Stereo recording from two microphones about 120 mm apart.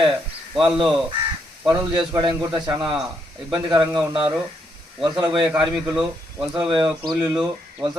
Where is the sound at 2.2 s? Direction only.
40° right (ahead or behind).